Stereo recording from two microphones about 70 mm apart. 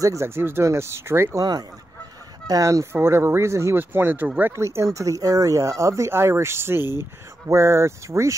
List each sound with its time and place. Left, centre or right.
0.0 s speech: right
1.3 s speech: right
2.4 s speech: right
3.7 s speech: right
4.6 s speech: right
6.8 s speech: left
7.4 s speech: right